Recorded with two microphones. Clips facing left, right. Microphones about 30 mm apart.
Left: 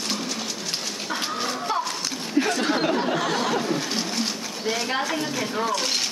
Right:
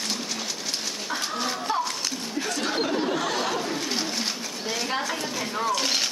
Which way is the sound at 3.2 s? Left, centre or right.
Centre.